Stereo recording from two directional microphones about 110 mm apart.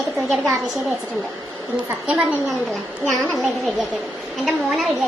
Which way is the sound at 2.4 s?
Centre (ahead or behind).